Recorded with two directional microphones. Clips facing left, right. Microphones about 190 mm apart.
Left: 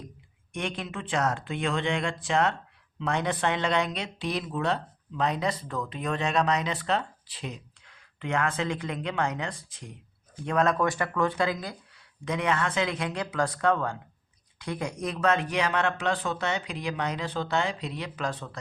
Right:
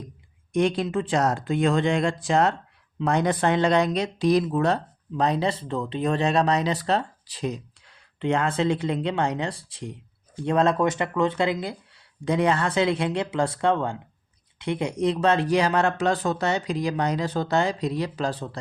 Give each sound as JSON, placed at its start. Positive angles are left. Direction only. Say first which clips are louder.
{"t": 0.5, "sound": "speech", "louder": "right 11 dB", "side_deg": -35}